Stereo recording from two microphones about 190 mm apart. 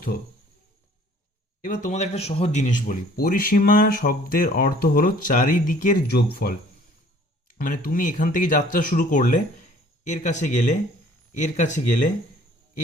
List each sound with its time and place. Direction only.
1.6 s speech: 45° left (ahead or behind)
7.6 s speech: 45° left (ahead or behind)